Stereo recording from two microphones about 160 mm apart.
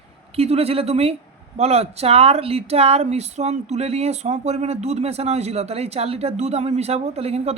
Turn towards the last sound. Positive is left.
turn(degrees=-40)  # may be behind; listen again after turning